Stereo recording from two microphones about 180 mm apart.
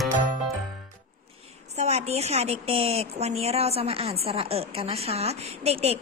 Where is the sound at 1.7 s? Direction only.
35° right (ahead or behind).